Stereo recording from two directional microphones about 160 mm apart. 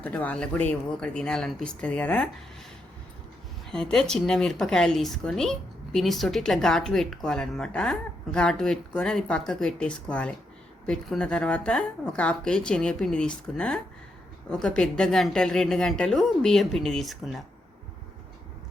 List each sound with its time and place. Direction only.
0.0 s speech: 10° left (ahead or behind)
3.7 s a woman's voice: 5° left (ahead or behind)